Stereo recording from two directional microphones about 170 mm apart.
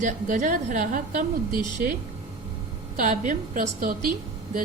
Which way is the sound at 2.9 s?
50° right (ahead or behind).